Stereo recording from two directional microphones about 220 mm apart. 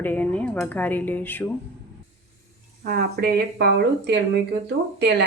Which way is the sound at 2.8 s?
40° right (ahead or behind).